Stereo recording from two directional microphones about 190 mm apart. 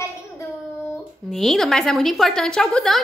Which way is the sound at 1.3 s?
Centre (ahead or behind).